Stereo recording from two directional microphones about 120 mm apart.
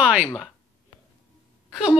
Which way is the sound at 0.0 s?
10° right (ahead or behind).